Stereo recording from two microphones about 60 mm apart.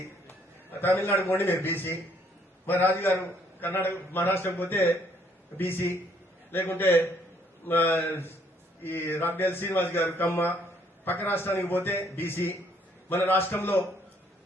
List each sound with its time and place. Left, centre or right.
0.3 s a man's voice: left